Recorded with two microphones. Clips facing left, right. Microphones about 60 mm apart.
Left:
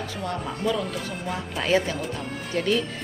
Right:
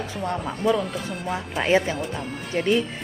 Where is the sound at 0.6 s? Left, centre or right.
Centre.